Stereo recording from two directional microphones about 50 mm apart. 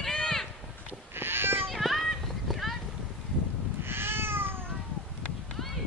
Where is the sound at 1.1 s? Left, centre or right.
Right.